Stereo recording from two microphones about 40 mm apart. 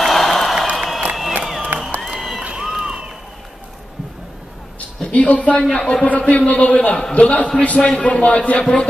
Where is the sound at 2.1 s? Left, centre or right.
Centre.